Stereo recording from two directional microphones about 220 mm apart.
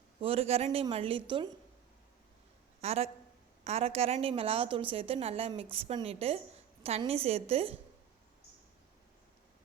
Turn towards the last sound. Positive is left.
turn(degrees=-25)  # may be behind; listen again after turning